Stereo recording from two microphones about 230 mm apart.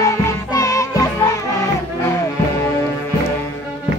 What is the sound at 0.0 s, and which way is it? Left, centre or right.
Music, centre.